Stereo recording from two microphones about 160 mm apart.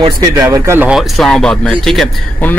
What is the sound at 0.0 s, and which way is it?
Speech, 20° right (ahead or behind).